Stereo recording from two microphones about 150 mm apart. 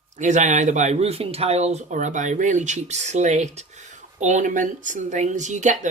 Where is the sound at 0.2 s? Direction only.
55° right (ahead or behind).